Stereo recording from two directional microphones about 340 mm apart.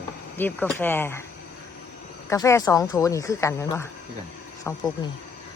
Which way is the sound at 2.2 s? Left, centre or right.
Centre.